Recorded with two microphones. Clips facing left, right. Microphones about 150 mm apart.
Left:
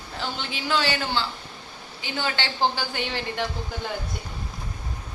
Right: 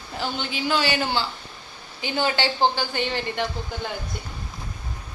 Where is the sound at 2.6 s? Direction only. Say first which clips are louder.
Even; 5° left (ahead or behind).